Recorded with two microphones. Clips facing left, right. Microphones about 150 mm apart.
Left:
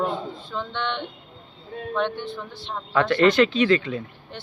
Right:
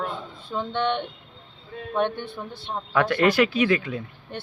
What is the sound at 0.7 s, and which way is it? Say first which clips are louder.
Speech: right 5 dB; 45° right (ahead or behind).